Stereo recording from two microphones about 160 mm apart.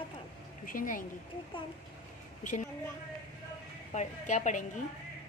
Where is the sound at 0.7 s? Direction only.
60° left (ahead or behind).